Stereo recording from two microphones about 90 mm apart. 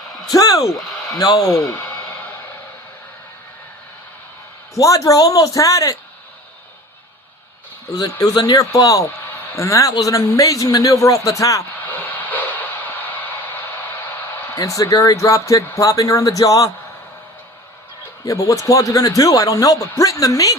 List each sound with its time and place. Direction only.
0.3 s speech: 40° left (ahead or behind)
4.7 s a man's voice: 40° left (ahead or behind)
7.9 s a man's voice: 40° left (ahead or behind)
11.8 s a sound: 20° left (ahead or behind)
14.5 s a man's voice: 40° left (ahead or behind)
18.3 s a man's voice: 35° left (ahead or behind)